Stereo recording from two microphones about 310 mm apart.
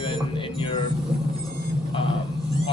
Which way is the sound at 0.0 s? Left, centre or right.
Centre.